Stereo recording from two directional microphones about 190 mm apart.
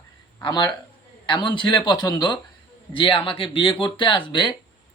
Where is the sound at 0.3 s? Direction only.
20° left (ahead or behind).